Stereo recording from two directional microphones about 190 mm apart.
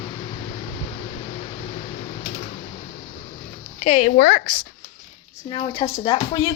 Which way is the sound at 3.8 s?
35° left (ahead or behind).